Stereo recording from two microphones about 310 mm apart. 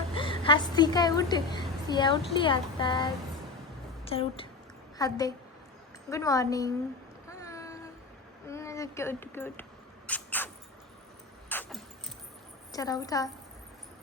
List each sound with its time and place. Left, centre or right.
0.1 s a woman's voice: centre
7.3 s a sound: centre
8.4 s speech: centre
10.1 s rodents: centre
11.4 s keys jangling: centre
12.7 s a woman's voice: centre